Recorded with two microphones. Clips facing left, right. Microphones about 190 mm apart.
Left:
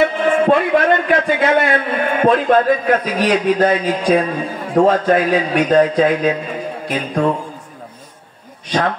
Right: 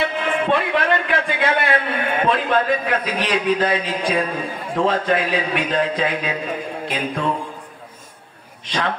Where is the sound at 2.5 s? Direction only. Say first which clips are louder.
Left 6 dB; 45° left (ahead or behind).